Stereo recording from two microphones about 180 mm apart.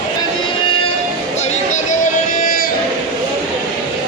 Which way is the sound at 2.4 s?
50° left (ahead or behind).